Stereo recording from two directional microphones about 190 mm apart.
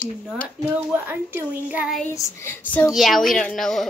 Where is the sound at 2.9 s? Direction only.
Centre (ahead or behind).